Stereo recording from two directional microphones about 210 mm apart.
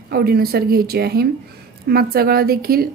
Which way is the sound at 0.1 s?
45° right (ahead or behind).